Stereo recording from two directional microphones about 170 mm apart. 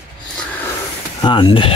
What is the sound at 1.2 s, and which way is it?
Speech, 25° left (ahead or behind).